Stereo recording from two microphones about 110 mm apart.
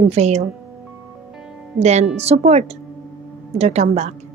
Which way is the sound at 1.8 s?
90° right.